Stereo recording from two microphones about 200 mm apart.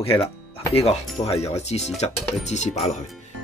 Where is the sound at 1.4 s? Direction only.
35° left (ahead or behind).